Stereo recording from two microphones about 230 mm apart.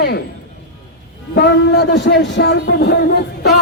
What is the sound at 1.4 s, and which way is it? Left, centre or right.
Speech, left.